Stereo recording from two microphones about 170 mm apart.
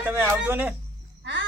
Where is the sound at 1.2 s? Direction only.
90° right.